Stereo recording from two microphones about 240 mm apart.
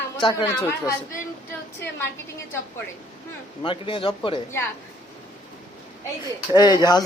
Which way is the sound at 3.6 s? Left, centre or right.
Left.